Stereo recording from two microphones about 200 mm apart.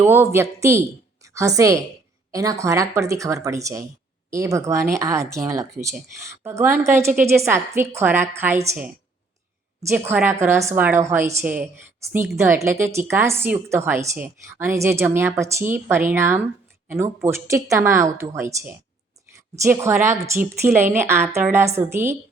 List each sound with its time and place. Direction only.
0.0 s a woman's voice: 10° right (ahead or behind)